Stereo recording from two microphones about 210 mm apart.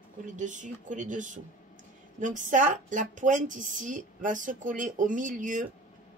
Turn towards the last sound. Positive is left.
turn(degrees=-40)  # may be behind; listen again after turning